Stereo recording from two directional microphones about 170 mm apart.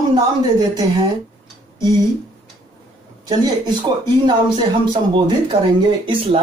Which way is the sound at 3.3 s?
25° right (ahead or behind).